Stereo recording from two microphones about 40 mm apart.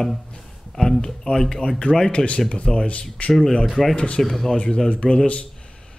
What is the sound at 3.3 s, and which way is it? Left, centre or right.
Speech, centre.